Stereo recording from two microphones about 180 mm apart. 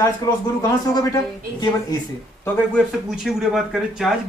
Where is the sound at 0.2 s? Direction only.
20° left (ahead or behind).